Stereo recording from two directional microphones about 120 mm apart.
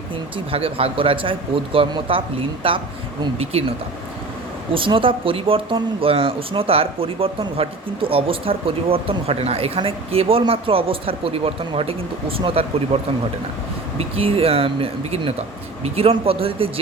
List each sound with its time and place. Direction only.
0.5 s speech: 50° right (ahead or behind)
4.7 s speech: 45° right (ahead or behind)
14.0 s speech: 55° right (ahead or behind)